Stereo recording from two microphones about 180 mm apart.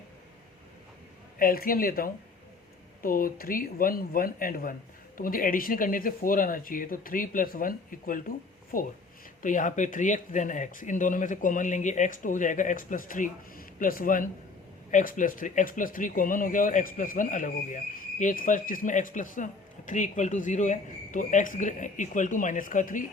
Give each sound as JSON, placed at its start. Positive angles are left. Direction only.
{"t": 1.4, "sound": "speech", "side_deg": 55}